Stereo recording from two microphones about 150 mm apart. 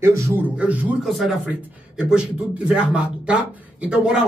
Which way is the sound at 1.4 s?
10° right (ahead or behind).